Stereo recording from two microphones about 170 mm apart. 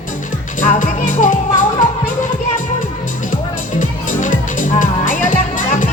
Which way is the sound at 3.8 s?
50° left (ahead or behind).